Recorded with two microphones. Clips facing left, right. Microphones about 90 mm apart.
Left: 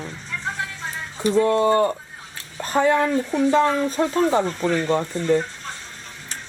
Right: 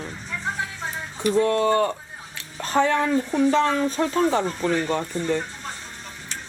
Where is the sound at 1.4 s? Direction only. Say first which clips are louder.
Left 4 dB; 20° left (ahead or behind).